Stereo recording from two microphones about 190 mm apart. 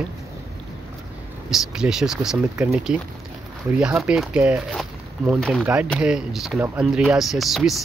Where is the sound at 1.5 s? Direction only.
5° right (ahead or behind).